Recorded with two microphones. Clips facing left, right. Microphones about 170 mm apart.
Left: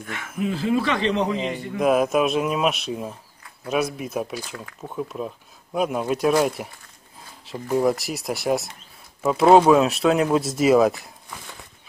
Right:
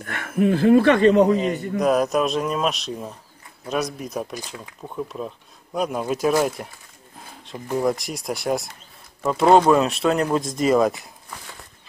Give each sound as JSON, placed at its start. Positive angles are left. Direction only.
{"t": 0.0, "sound": "a man's voice", "side_deg": -55}
{"t": 1.8, "sound": "speech", "side_deg": 5}